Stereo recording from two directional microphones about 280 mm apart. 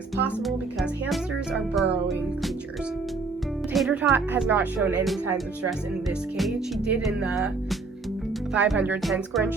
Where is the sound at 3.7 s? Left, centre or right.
Centre.